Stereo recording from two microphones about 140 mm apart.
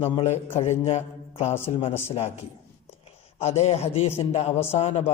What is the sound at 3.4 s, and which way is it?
A man's voice, 45° left (ahead or behind).